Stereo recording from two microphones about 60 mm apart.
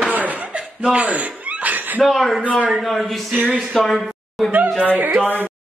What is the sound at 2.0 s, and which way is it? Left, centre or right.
A man's voice, centre.